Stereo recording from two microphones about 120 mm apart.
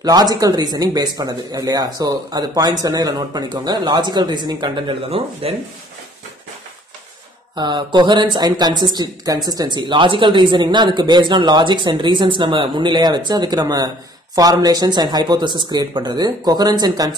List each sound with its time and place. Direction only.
0.0 s speech: 35° right (ahead or behind)
5.1 s speech: 55° right (ahead or behind)
7.5 s speech: 35° right (ahead or behind)